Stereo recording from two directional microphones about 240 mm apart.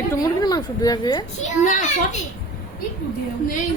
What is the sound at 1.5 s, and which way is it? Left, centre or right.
Speech, left.